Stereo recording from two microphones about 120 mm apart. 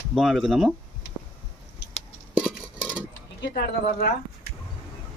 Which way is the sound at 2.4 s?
10° right (ahead or behind).